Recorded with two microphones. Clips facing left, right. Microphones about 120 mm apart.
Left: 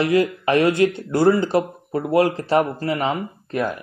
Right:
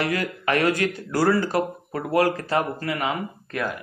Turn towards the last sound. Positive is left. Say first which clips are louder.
# left 5 dB
turn(degrees=25)  # may be behind; listen again after turning